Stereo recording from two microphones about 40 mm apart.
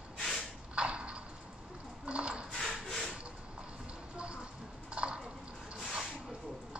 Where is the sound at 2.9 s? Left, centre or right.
Centre.